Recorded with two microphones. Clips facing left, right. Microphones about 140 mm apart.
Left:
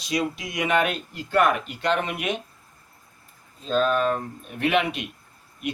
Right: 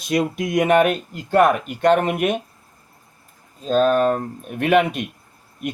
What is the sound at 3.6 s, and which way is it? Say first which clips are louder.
Speech: right 5 dB; 45° right (ahead or behind).